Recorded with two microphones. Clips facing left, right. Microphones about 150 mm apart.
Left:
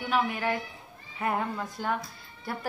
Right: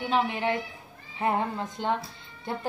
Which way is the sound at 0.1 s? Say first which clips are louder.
Right 1 dB; 25° right (ahead or behind).